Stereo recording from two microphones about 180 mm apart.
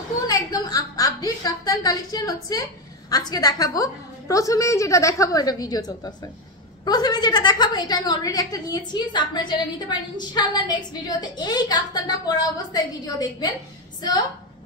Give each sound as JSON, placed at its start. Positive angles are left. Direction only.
{"t": 0.3, "sound": "a woman's voice", "side_deg": 20}